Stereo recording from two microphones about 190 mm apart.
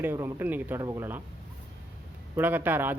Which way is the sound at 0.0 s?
10° right (ahead or behind).